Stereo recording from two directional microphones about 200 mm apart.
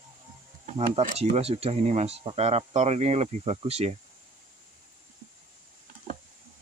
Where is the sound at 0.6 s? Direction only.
30° right (ahead or behind).